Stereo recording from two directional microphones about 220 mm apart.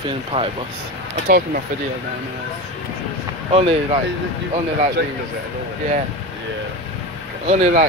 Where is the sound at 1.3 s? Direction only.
40° right (ahead or behind).